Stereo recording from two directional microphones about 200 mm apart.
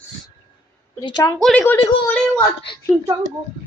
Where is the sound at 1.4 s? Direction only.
5° left (ahead or behind).